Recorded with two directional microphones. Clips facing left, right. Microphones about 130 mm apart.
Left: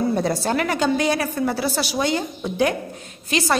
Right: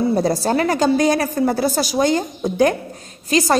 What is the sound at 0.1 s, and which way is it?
A woman's voice, 35° right (ahead or behind).